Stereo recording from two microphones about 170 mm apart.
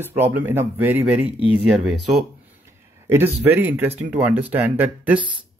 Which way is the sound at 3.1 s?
15° right (ahead or behind).